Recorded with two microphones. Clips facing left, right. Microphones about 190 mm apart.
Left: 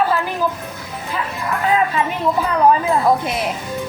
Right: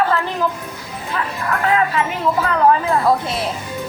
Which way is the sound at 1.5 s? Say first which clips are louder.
Even; 15° left (ahead or behind).